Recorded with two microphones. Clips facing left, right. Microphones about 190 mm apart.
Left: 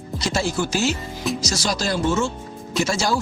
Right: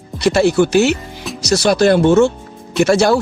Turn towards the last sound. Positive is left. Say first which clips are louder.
# right 10 dB
turn(degrees=-65)  # may be behind; listen again after turning